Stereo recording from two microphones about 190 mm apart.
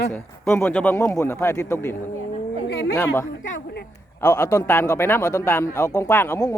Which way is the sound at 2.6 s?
65° left (ahead or behind).